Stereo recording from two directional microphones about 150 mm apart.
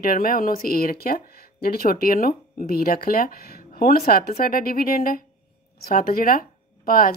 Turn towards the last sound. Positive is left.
turn(degrees=70)  # may be behind; listen again after turning